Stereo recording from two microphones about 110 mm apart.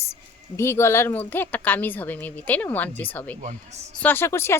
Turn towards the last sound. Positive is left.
turn(degrees=25)  # may be behind; listen again after turning